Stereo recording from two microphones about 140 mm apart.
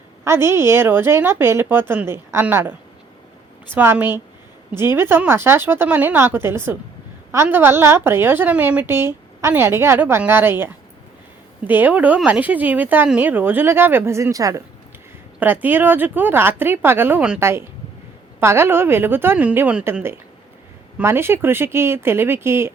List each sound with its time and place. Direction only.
0.3 s a woman's voice: 15° right (ahead or behind)
3.8 s a woman's voice: 15° right (ahead or behind)